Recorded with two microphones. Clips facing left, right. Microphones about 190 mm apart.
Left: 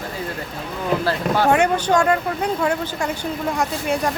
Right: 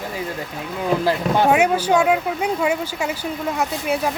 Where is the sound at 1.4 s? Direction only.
5° right (ahead or behind).